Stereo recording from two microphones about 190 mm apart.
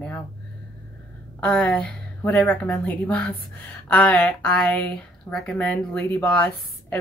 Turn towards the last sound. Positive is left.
turn(degrees=10)  # may be behind; listen again after turning